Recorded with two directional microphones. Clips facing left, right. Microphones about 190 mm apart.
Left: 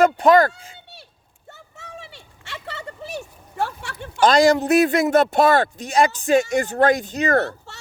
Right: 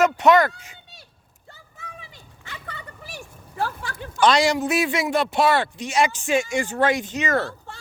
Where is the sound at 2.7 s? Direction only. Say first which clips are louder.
Left 7 dB; 85° left.